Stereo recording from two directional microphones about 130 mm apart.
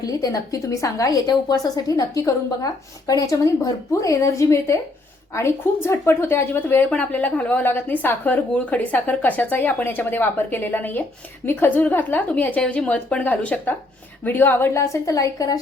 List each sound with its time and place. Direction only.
0.0 s a woman's voice: 30° left (ahead or behind)